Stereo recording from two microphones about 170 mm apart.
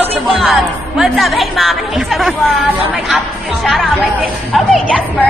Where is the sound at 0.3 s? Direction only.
Centre (ahead or behind).